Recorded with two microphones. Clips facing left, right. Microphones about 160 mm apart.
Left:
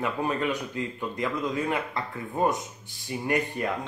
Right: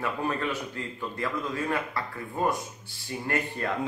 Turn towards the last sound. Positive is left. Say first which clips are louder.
# left 3 dB
turn(degrees=15)  # may be behind; listen again after turning